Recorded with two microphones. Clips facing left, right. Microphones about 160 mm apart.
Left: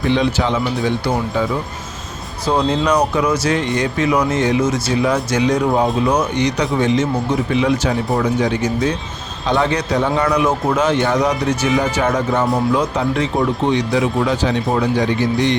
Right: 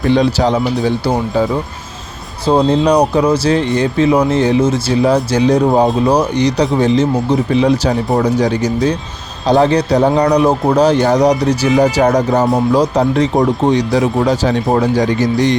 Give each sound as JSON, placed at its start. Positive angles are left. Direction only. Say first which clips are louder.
{"t": 0.1, "sound": "speech", "louder": "right 5 dB", "side_deg": -40}
{"t": 2.5, "sound": "speech", "louder": "right 5 dB", "side_deg": -30}